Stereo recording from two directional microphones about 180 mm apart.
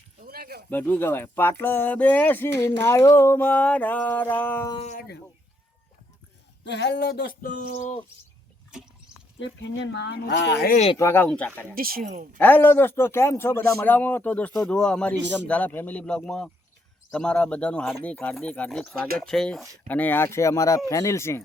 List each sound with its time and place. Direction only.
0.3 s a sound: 55° right (ahead or behind)
0.7 s a man's voice: 10° left (ahead or behind)
6.7 s speech: 70° left (ahead or behind); by 8.0 s 40° left (ahead or behind)
9.4 s speech: 85° left; by 10.8 s 65° left (ahead or behind)
10.9 s a man's voice: 15° left (ahead or behind)
11.7 s speech: 55° right (ahead or behind)
12.4 s a man's voice: 10° left (ahead or behind)